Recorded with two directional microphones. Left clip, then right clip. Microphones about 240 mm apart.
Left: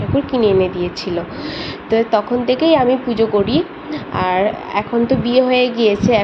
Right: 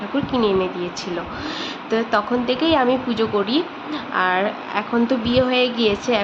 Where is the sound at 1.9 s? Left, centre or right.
Centre.